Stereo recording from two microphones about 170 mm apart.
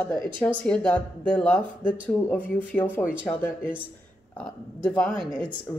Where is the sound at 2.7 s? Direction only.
10° left (ahead or behind).